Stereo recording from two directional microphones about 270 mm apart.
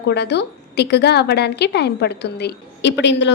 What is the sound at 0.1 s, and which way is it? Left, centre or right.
A woman's voice, left.